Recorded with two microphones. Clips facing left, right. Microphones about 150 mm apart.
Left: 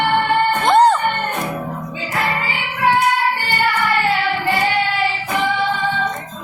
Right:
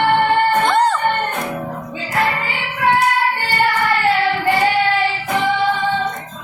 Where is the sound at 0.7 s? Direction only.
20° left (ahead or behind).